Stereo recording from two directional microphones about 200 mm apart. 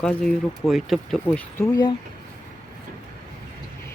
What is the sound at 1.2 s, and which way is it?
Speech, 15° left (ahead or behind).